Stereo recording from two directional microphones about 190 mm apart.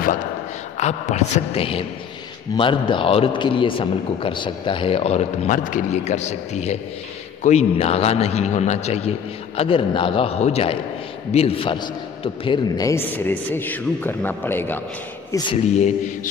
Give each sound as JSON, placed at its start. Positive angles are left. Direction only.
{"t": 0.7, "sound": "a man's voice", "side_deg": 35}